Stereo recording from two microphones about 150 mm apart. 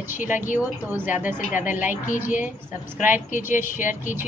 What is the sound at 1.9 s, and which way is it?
Speech, 60° left (ahead or behind).